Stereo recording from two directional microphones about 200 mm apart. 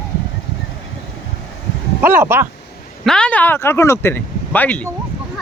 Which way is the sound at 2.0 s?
10° right (ahead or behind).